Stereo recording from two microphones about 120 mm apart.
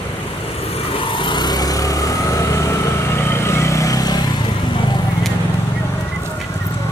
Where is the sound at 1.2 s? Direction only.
40° left (ahead or behind).